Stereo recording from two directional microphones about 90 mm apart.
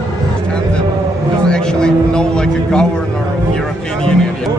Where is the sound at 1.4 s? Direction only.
10° left (ahead or behind).